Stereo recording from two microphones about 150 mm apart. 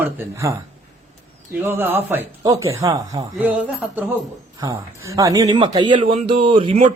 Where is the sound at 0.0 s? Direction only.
20° right (ahead or behind).